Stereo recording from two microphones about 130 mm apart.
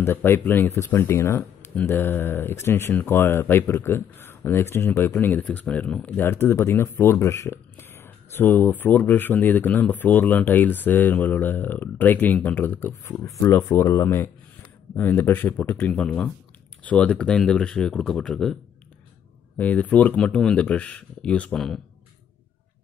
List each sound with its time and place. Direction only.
0.0 s speech: 20° left (ahead or behind)